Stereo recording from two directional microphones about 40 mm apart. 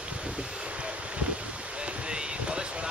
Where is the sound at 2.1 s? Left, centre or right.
Right.